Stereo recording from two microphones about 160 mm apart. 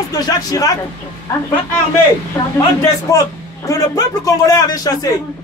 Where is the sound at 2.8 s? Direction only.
20° left (ahead or behind).